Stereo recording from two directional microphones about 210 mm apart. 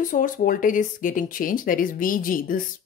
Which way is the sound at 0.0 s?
40° left (ahead or behind).